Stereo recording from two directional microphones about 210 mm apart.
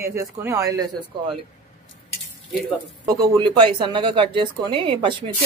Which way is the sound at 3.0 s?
20° right (ahead or behind).